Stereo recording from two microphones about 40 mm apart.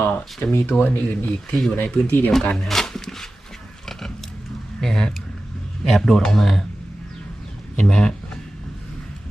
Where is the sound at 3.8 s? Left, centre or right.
Centre.